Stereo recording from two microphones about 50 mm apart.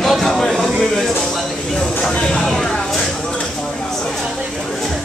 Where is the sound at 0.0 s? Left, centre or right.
Centre.